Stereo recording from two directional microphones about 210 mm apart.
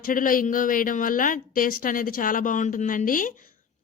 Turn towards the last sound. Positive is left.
turn(degrees=40)  # may be behind; listen again after turning